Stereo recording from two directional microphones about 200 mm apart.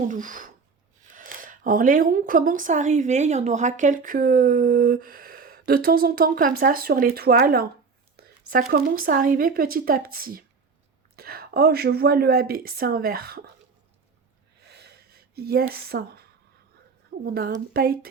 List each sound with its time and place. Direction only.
0.1 s speech: 40° right (ahead or behind)
8.1 s a sound: 45° right (ahead or behind)
8.7 s speech: 45° right (ahead or behind)
14.7 s gasp: 55° right (ahead or behind)
15.7 s speech: 50° right (ahead or behind)
17.2 s speech: 50° right (ahead or behind)